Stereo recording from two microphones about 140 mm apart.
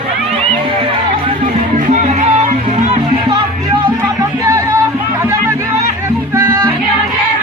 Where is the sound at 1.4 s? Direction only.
60° right (ahead or behind).